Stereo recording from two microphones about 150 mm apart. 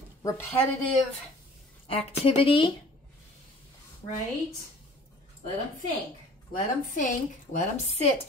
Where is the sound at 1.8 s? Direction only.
40° left (ahead or behind).